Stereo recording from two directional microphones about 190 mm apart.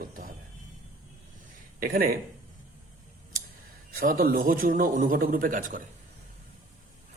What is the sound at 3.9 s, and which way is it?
Speech, 50° right (ahead or behind).